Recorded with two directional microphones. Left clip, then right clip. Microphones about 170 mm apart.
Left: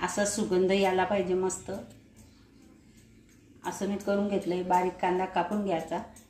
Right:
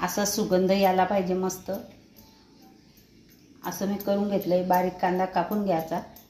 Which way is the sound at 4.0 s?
25° right (ahead or behind).